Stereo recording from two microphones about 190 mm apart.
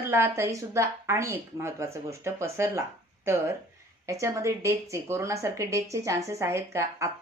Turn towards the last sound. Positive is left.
turn(degrees=-15)  # may be behind; listen again after turning